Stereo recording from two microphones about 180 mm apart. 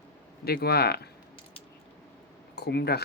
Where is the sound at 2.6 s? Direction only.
65° left (ahead or behind).